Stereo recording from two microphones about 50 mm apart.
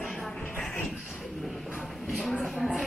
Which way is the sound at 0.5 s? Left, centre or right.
Left.